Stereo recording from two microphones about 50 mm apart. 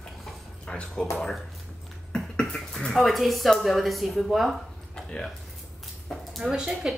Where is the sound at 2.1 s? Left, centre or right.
Centre.